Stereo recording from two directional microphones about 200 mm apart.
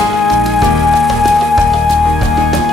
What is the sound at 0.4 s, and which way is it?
Music, centre (ahead or behind).